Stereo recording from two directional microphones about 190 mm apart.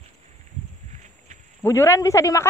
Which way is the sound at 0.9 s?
40° right (ahead or behind).